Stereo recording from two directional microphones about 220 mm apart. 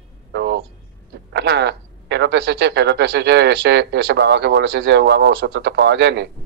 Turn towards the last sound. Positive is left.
turn(degrees=-50)  # may be behind; listen again after turning